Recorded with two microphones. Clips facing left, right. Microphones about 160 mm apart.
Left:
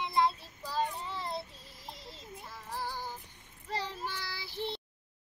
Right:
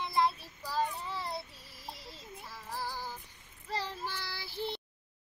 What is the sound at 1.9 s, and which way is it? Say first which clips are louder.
Music: right 1 dB; 20° left (ahead or behind).